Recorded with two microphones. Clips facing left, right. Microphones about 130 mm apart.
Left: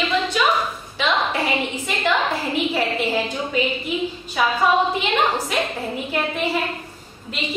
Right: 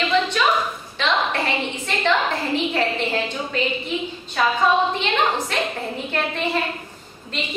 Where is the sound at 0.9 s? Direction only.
10° left (ahead or behind).